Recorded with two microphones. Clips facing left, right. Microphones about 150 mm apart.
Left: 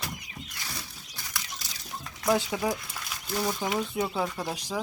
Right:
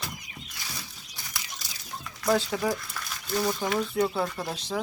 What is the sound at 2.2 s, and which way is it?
Speech, 15° left (ahead or behind).